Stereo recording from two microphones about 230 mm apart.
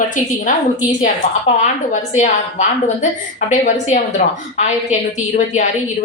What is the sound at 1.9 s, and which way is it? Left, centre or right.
Speech, left.